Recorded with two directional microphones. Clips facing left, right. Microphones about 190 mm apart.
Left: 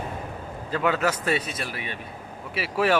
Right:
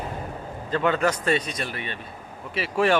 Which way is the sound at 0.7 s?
5° left (ahead or behind).